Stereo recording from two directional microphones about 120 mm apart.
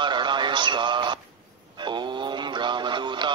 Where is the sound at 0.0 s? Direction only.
40° right (ahead or behind).